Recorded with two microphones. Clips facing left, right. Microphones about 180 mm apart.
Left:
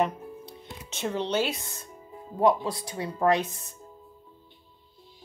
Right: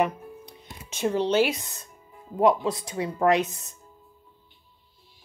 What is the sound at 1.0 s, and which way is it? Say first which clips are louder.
Speech: right 5 dB; 10° right (ahead or behind).